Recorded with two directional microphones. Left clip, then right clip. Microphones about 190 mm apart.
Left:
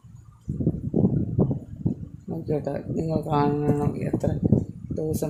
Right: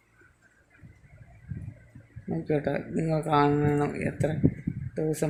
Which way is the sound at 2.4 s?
Centre (ahead or behind).